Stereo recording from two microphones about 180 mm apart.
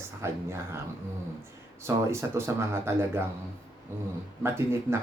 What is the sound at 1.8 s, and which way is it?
Speech, 15° right (ahead or behind).